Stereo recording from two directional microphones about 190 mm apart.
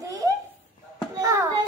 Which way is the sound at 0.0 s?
20° right (ahead or behind).